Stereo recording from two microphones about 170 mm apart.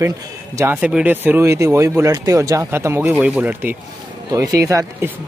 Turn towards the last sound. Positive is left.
turn(degrees=-20)  # may be behind; listen again after turning